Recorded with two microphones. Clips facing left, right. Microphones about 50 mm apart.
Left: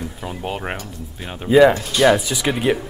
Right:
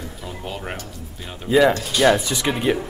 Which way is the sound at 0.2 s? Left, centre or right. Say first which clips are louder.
Left 5 dB; left.